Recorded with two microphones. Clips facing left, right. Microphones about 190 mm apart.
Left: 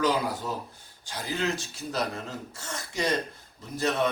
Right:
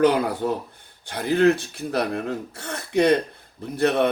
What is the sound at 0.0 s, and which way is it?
A man's voice, 60° right (ahead or behind).